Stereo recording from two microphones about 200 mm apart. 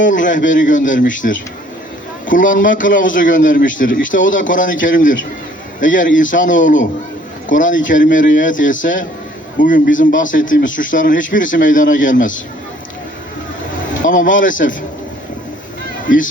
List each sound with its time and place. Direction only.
0.0 s a man's voice: 40° left (ahead or behind)
14.0 s a man's voice: 40° left (ahead or behind)
16.0 s a man's voice: 40° left (ahead or behind)